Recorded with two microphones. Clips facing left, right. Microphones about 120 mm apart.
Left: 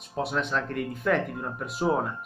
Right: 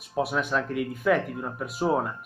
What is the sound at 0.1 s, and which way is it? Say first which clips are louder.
Speech: right 2 dB; 5° right (ahead or behind).